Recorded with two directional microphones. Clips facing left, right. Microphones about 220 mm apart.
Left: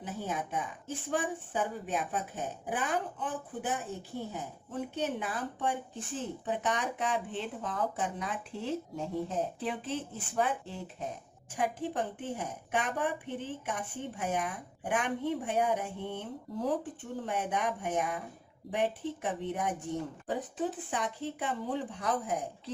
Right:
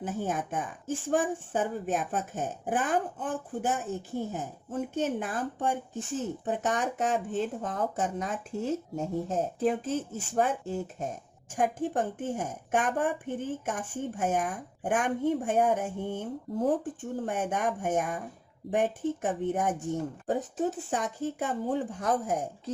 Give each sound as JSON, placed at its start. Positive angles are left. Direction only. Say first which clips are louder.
{"t": 0.0, "sound": "speech", "louder": "right 5 dB", "side_deg": -50}